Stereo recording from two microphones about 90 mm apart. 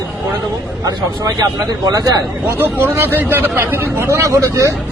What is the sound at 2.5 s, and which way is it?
Speech, 25° right (ahead or behind).